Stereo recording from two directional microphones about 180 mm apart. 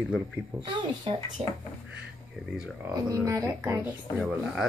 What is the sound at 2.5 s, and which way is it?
Speech, 5° right (ahead or behind).